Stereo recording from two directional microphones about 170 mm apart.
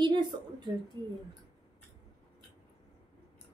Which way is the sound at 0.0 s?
25° right (ahead or behind).